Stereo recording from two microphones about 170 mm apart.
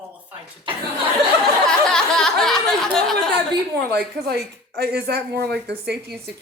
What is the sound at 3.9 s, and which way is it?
Speech, 70° right (ahead or behind).